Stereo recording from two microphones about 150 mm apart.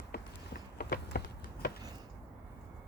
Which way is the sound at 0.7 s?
90° left.